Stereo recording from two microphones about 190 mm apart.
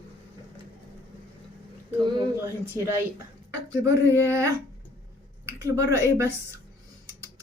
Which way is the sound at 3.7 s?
15° right (ahead or behind).